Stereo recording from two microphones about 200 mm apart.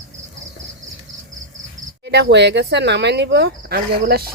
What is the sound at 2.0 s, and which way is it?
Speech, 60° right (ahead or behind).